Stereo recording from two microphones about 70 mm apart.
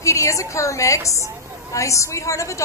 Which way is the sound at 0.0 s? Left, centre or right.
Left.